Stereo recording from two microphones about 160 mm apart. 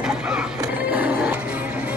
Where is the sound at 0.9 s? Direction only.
10° right (ahead or behind).